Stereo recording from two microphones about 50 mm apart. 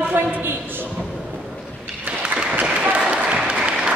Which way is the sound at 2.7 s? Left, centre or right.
Right.